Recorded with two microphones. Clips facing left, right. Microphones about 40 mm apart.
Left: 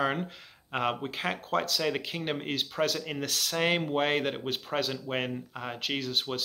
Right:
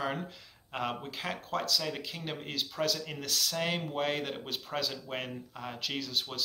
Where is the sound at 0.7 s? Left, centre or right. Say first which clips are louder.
Left 5 dB; left.